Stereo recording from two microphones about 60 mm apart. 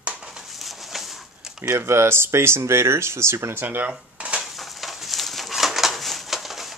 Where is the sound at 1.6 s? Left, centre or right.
Right; by 4.4 s centre.